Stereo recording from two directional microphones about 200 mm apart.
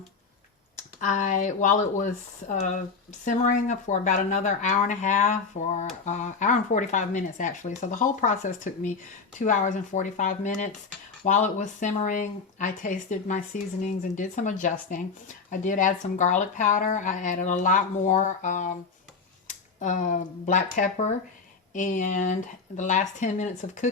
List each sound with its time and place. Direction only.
0.8 s speech: 40° left (ahead or behind)